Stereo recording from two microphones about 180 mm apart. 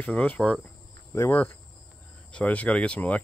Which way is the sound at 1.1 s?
10° left (ahead or behind).